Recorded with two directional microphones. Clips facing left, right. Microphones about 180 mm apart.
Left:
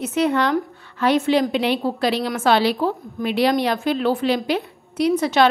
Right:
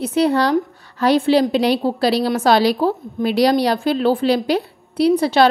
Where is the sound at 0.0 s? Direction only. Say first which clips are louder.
Right 3 dB; 35° right (ahead or behind).